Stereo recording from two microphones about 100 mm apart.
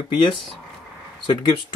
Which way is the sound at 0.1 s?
55° left (ahead or behind).